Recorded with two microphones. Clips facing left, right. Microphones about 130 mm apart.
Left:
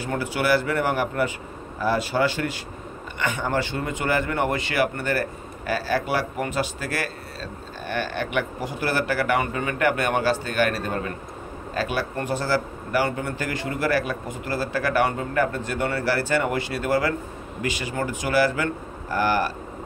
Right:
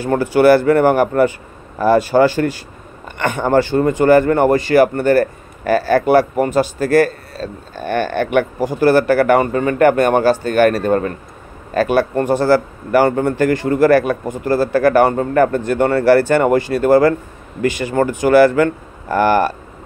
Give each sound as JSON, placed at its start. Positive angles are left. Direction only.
{"t": 0.0, "sound": "speech", "side_deg": -45}
{"t": 3.2, "sound": "speech", "side_deg": -55}